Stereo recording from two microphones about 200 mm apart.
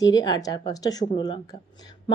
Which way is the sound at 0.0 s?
20° left (ahead or behind).